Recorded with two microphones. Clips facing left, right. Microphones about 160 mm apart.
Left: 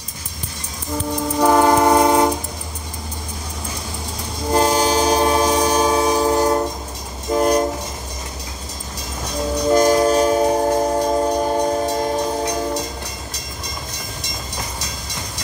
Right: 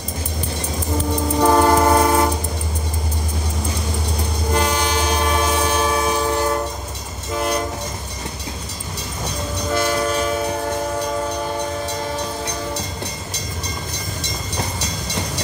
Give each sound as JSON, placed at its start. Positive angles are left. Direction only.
{"t": 1.4, "sound": "train", "side_deg": 10}
{"t": 4.6, "sound": "train", "side_deg": 35}
{"t": 9.7, "sound": "train", "side_deg": 35}